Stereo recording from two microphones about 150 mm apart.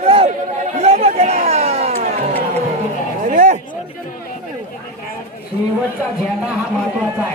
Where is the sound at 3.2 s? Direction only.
55° right (ahead or behind).